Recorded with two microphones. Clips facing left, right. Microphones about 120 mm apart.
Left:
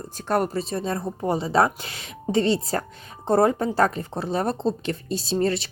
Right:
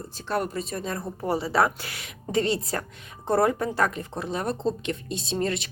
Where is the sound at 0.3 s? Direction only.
40° left (ahead or behind).